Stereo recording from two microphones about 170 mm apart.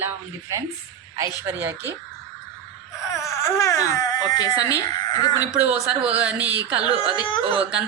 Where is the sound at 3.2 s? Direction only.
15° left (ahead or behind).